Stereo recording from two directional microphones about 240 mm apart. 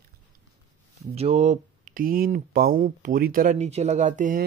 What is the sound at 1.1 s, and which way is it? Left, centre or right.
Speech, right.